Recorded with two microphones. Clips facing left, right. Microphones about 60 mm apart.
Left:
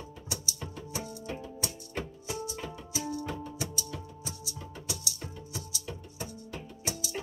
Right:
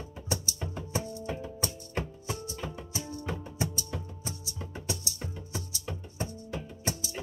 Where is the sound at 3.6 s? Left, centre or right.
Right.